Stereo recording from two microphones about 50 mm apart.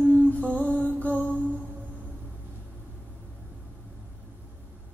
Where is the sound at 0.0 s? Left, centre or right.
Left.